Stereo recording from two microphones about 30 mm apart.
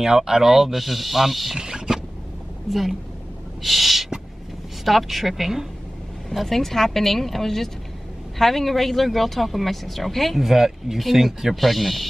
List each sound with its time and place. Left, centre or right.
0.0 s speech: right
0.5 s speech: centre
1.6 s a sound: right
2.7 s speech: centre
3.6 s owl: centre
4.8 s speech: centre
6.4 s speech: centre
10.4 s speech: centre